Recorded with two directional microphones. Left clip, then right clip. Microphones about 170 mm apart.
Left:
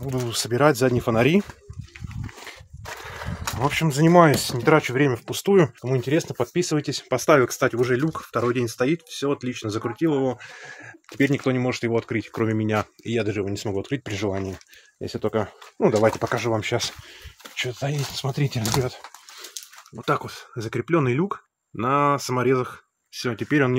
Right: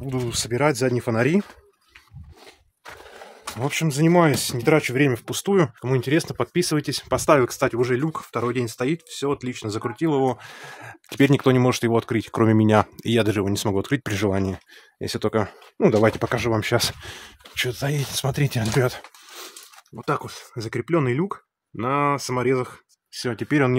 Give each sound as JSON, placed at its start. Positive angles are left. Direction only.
{"t": 0.3, "sound": "speech", "side_deg": -10}
{"t": 3.6, "sound": "speech", "side_deg": -15}
{"t": 15.0, "sound": "speech", "side_deg": -35}
{"t": 17.6, "sound": "speech", "side_deg": -40}
{"t": 20.0, "sound": "speech", "side_deg": -5}